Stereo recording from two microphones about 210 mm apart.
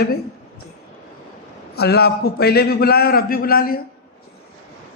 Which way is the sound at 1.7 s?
50° left (ahead or behind).